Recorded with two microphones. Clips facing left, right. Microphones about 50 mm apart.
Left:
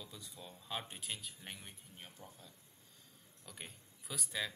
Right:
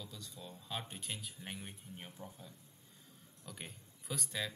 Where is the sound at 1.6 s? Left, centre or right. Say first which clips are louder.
Right 5 dB; centre.